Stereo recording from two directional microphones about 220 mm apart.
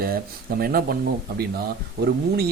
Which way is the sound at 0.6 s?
40° right (ahead or behind).